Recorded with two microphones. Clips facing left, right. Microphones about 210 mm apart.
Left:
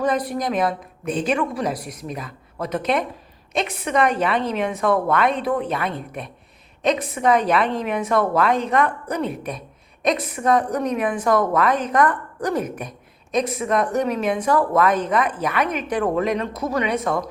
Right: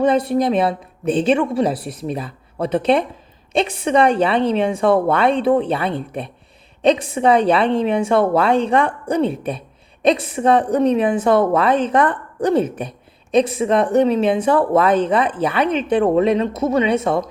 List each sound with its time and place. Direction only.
0.0 s a woman's voice: 30° right (ahead or behind)